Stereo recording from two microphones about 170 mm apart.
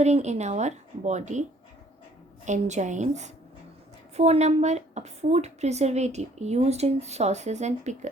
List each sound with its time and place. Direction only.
0.0 s a woman's voice: 40° right (ahead or behind)